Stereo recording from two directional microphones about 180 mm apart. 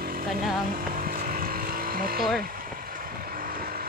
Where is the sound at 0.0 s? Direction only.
55° right (ahead or behind).